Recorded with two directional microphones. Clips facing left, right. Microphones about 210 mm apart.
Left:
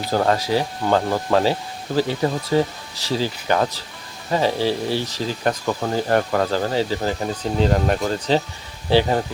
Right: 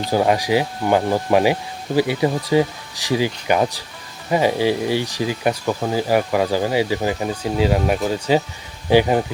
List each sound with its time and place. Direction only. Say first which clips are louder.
0.1 s speech: right 2 dB; 15° right (ahead or behind)